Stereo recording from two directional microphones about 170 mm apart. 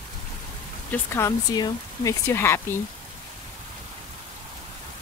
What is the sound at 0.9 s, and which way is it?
Speech, 15° left (ahead or behind).